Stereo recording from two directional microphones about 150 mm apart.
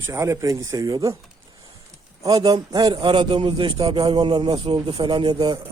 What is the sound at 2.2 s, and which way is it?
A man's voice, 25° right (ahead or behind).